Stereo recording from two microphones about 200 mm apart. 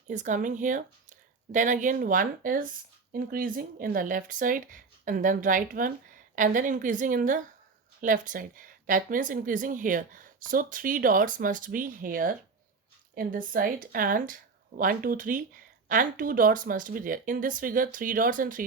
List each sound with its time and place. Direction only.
0.1 s speech: 40° right (ahead or behind)